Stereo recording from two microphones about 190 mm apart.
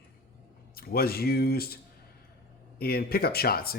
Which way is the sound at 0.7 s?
55° left (ahead or behind).